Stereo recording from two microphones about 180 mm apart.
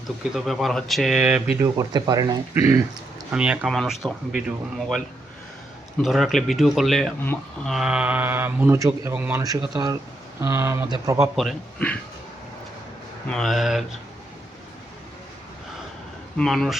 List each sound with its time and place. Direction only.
0.3 s speech: centre (ahead or behind)
1.6 s speech: 20° right (ahead or behind); by 7.1 s centre (ahead or behind)
7.2 s speech: 10° left (ahead or behind)
7.7 s speech: 5° right (ahead or behind)
11.3 s speech: 5° left (ahead or behind)
13.2 s speech: centre (ahead or behind)
16.4 s speech: centre (ahead or behind)